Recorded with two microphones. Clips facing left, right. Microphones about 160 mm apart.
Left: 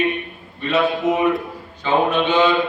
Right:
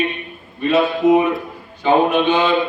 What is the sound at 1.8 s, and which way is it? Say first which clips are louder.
Speech: right 4 dB; 10° right (ahead or behind).